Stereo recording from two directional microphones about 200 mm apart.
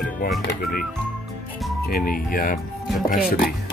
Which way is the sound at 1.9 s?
45° left (ahead or behind).